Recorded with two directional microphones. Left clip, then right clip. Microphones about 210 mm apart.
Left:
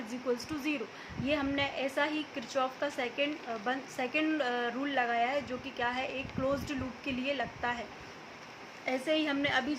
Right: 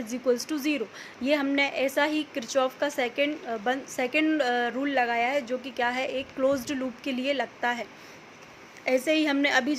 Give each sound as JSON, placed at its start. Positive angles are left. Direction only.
{"t": 0.1, "sound": "a woman's voice", "side_deg": -40}